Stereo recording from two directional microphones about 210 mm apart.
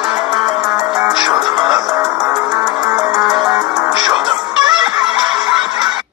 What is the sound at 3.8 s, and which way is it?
Music, centre (ahead or behind).